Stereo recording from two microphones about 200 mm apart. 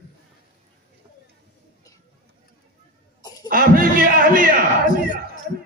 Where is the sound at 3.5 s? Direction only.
45° right (ahead or behind).